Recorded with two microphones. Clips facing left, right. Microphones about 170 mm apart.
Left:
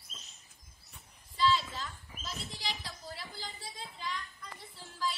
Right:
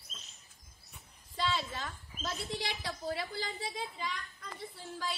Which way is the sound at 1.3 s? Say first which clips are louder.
Left 4 dB; 55° right (ahead or behind).